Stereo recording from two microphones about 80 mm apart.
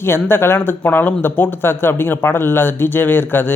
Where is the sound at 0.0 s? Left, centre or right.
Left.